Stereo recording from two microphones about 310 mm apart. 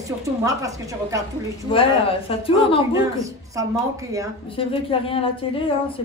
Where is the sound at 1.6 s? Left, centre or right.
Centre.